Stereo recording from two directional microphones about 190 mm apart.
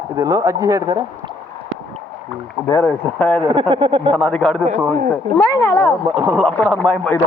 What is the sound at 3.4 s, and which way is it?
Speech, 25° right (ahead or behind).